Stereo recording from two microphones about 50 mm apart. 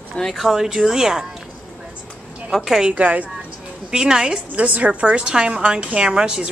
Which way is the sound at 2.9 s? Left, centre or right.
Right.